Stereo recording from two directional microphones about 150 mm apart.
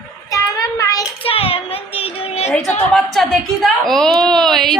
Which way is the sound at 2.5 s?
5° left (ahead or behind).